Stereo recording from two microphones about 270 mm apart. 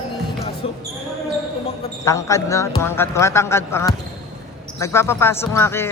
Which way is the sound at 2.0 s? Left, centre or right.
Centre.